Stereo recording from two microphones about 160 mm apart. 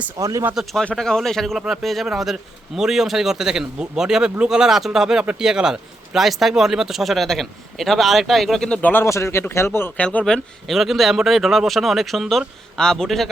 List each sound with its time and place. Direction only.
0.2 s speech: 20° right (ahead or behind)
0.5 s speech: centre (ahead or behind)